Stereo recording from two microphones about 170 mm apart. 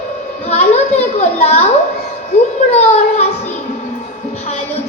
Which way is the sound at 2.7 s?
40° left (ahead or behind).